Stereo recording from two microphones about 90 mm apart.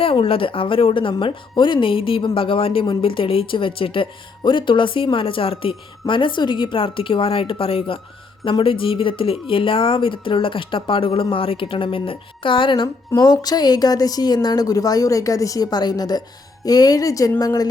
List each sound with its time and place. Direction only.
0.0 s speech: 90° left
2.9 s speech: 75° left (ahead or behind)
13.1 s speech: 50° left (ahead or behind)